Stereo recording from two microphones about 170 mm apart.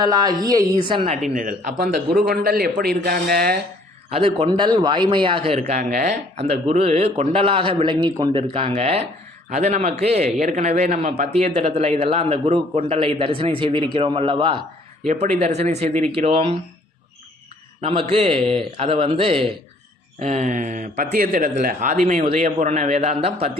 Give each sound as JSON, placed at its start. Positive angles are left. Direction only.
{"t": 0.0, "sound": "a man's voice", "side_deg": -25}
{"t": 1.3, "sound": "a man's voice", "side_deg": -50}
{"t": 1.8, "sound": "a man's voice", "side_deg": -65}
{"t": 4.1, "sound": "a man's voice", "side_deg": -35}
{"t": 5.5, "sound": "a man's voice", "side_deg": -45}
{"t": 15.0, "sound": "a man's voice", "side_deg": -40}
{"t": 17.7, "sound": "a man's voice", "side_deg": -35}
{"t": 20.9, "sound": "a man's voice", "side_deg": -60}